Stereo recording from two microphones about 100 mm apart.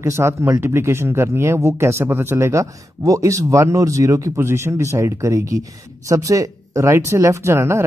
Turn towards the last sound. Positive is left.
turn(degrees=-25)  # may be behind; listen again after turning